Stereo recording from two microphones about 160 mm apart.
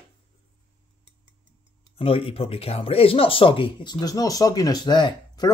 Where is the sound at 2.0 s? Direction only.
35° left (ahead or behind).